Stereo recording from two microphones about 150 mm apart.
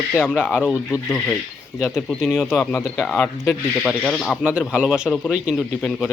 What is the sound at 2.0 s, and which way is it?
Speech, 5° left (ahead or behind).